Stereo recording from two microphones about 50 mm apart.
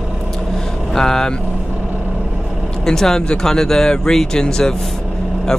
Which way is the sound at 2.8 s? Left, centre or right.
Centre.